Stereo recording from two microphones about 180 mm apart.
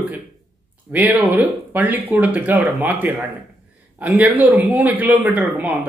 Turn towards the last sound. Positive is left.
turn(degrees=-10)  # may be behind; listen again after turning